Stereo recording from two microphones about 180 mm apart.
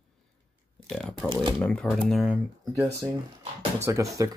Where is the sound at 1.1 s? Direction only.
25° right (ahead or behind).